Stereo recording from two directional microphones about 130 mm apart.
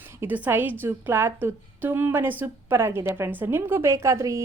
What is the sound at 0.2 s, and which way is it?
A woman's voice, 15° right (ahead or behind).